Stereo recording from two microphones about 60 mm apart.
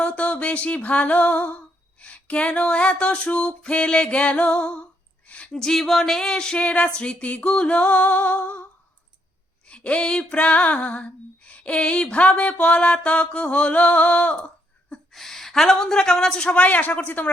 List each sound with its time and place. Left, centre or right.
0.0 s music: centre
2.0 s female singing: left
5.3 s a woman's voice: centre
7.4 s female singing: centre
9.6 s female singing: left
15.1 s a woman's voice: centre; by 17.2 s left